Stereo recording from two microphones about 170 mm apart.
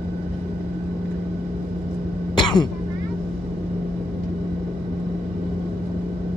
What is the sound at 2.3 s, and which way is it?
Throat clearing, 25° left (ahead or behind).